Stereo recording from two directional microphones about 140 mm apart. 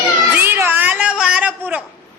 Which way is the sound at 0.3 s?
15° right (ahead or behind).